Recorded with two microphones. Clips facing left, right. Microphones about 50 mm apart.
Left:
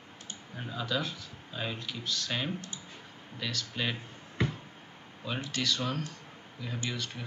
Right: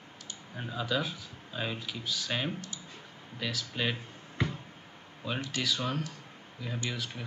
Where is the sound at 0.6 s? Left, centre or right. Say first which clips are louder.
Right 1 dB; centre.